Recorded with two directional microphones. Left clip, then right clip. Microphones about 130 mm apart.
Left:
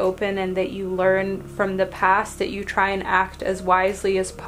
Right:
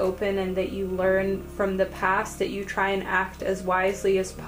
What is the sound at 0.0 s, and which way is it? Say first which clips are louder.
A woman's voice: left 3 dB; 35° left (ahead or behind).